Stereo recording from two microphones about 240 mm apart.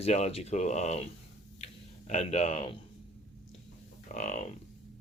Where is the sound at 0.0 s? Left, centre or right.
Left.